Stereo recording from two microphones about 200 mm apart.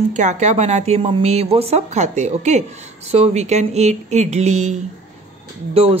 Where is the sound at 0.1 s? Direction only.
35° right (ahead or behind).